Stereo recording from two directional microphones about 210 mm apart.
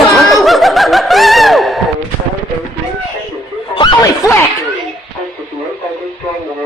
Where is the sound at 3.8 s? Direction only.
20° left (ahead or behind).